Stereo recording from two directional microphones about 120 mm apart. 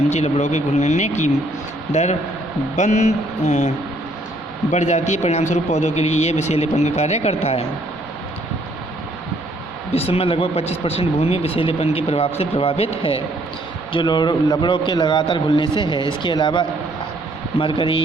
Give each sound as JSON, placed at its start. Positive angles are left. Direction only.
{"t": 0.1, "sound": "speech", "side_deg": 75}
{"t": 4.7, "sound": "speech", "side_deg": 70}
{"t": 9.9, "sound": "speech", "side_deg": 55}
{"t": 13.9, "sound": "a man's voice", "side_deg": 40}